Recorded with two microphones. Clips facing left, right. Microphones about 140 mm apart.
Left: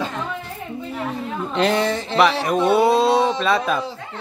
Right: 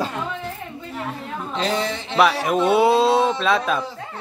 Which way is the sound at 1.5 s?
65° left (ahead or behind).